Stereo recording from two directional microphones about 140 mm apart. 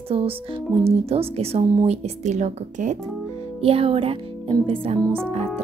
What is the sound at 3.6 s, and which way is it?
Speech, 45° right (ahead or behind).